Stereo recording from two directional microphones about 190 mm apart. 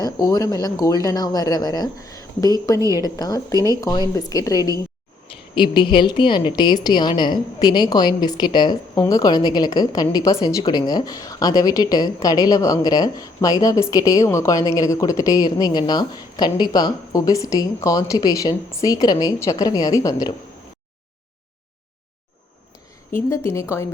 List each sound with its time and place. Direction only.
0.0 s a woman's voice: 20° left (ahead or behind)
23.3 s a woman's voice: 15° left (ahead or behind)